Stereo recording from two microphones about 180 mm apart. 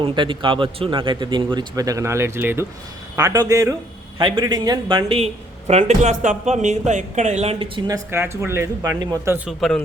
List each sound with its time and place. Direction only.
0.0 s a man's voice: 25° right (ahead or behind)
7.9 s a man's voice: 15° right (ahead or behind)
9.5 s speech: centre (ahead or behind)